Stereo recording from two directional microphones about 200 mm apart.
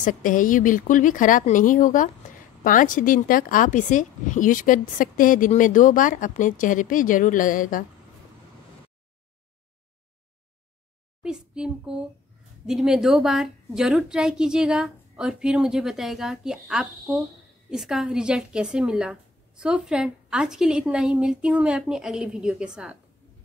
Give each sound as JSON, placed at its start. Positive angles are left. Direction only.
{"t": 0.0, "sound": "speech", "side_deg": 40}
{"t": 11.2, "sound": "a woman's voice", "side_deg": -5}